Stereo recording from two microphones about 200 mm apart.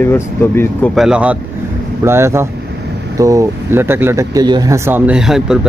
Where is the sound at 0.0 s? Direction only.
10° left (ahead or behind).